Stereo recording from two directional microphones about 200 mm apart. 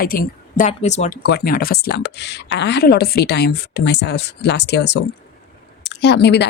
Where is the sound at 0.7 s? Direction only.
35° left (ahead or behind).